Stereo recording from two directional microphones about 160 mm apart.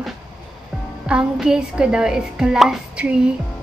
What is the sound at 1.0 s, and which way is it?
A woman's voice, 5° right (ahead or behind).